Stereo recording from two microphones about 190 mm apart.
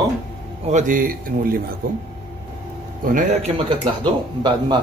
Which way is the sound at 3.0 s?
45° right (ahead or behind).